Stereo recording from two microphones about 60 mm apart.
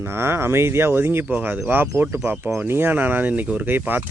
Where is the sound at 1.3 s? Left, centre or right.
Right.